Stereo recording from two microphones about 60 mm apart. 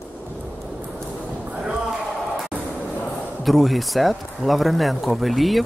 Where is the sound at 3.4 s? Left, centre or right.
Centre.